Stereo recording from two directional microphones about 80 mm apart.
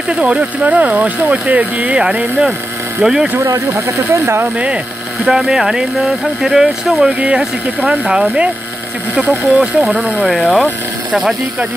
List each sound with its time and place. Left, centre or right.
0.1 s speech: centre
3.3 s speech: right
5.2 s speech: centre
9.3 s speech: centre